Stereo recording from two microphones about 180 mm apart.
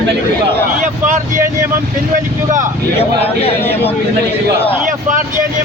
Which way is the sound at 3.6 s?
10° left (ahead or behind).